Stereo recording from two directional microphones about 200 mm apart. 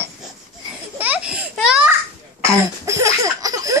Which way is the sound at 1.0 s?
5° right (ahead or behind).